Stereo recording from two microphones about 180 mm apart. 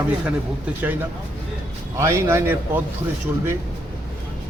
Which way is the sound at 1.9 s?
15° right (ahead or behind).